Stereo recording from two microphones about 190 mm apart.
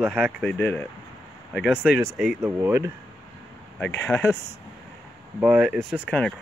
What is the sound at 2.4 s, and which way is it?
Speech, 15° right (ahead or behind).